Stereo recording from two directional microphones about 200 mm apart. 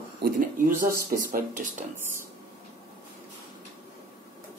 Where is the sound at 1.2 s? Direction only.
40° right (ahead or behind).